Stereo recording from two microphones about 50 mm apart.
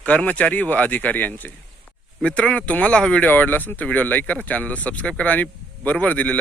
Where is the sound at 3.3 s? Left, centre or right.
Left.